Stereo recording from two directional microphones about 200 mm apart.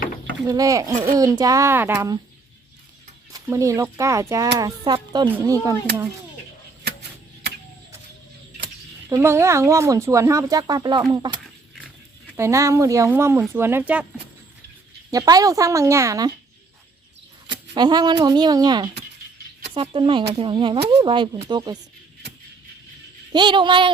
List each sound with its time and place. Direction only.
0.4 s speech: 20° right (ahead or behind)
3.3 s speech: 15° right (ahead or behind)
9.0 s speech: 15° right (ahead or behind)
15.1 s speech: 20° right (ahead or behind)
17.4 s speech: 20° right (ahead or behind)
23.3 s speech: 25° right (ahead or behind)